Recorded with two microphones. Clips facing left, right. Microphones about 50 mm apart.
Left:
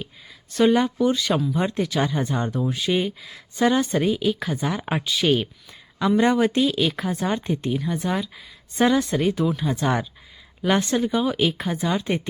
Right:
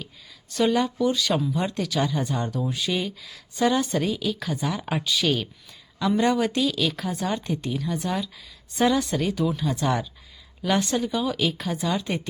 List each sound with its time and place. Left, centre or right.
0.6 s a woman's voice: centre
2.6 s speech: centre
2.9 s a woman's voice: centre